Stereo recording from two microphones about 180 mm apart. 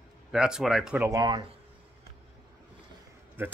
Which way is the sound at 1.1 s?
20° right (ahead or behind).